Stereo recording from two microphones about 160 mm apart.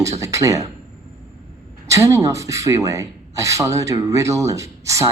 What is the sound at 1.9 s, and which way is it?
Speech, 20° right (ahead or behind).